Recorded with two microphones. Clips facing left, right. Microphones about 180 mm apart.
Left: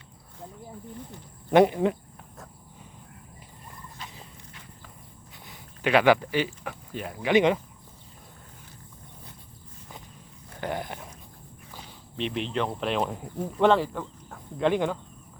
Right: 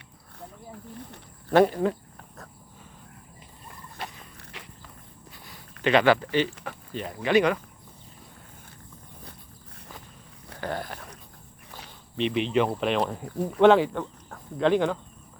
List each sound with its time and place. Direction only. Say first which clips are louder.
1.5 s speech: left 1 dB; 15° left (ahead or behind)
4.0 s dog: right 7 dB; 65° right (ahead or behind)
4.5 s walk: right 9 dB; 85° right
5.5 s a sound: right 1 dB; 10° left (ahead or behind)
6.7 s speech: right 1 dB; 5° left (ahead or behind)
10.6 s a sound: even; 20° left (ahead or behind)
12.1 s speech: right 5 dB; centre (ahead or behind)
13.2 s speech: right 3 dB; 70° right (ahead or behind)
13.6 s speech: right 4 dB; centre (ahead or behind)
14.3 s speech: right 2 dB; 10° left (ahead or behind)